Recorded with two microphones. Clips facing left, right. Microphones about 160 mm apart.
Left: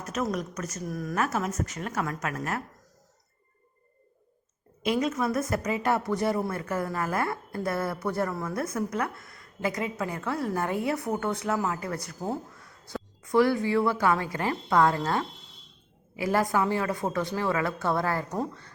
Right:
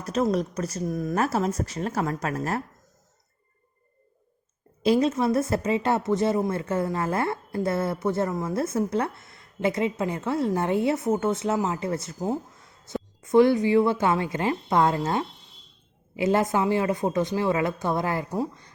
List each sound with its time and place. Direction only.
0.0 s speech: 30° right (ahead or behind)
4.8 s a woman's voice: 30° right (ahead or behind); by 18.7 s 10° right (ahead or behind)